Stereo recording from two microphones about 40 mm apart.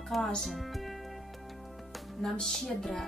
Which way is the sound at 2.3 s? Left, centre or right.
Centre.